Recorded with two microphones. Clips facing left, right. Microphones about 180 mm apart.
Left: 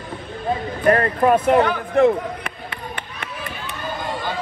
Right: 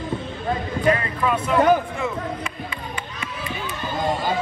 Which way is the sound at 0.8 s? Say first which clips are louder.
Left 6 dB; 55° left (ahead or behind).